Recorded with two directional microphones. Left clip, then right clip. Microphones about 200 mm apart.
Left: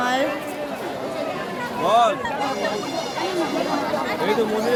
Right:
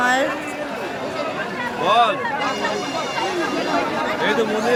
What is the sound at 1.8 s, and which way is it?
Speech, 65° left (ahead or behind).